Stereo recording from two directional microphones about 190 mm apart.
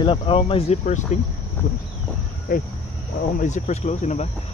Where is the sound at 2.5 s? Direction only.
45° left (ahead or behind).